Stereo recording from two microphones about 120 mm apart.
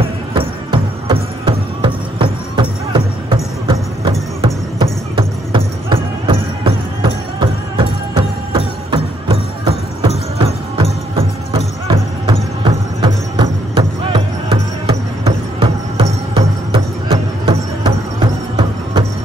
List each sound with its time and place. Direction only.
0.3 s music: 45° right (ahead or behind)
12.3 s music: 45° right (ahead or behind)